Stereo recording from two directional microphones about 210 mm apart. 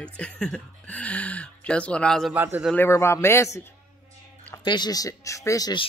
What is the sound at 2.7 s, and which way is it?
Speech, 10° left (ahead or behind).